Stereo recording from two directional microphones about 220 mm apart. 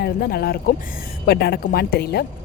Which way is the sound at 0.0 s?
45° left (ahead or behind).